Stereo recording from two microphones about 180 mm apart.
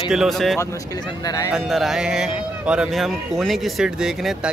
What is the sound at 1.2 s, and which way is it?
Speech, 20° left (ahead or behind).